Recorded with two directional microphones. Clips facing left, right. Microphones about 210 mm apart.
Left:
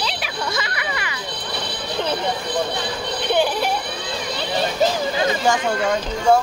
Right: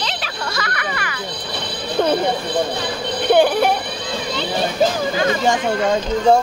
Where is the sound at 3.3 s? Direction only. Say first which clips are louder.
Right 6 dB; 55° right (ahead or behind).